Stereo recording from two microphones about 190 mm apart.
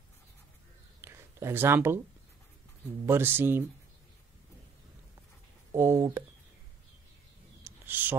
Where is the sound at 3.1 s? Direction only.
10° right (ahead or behind).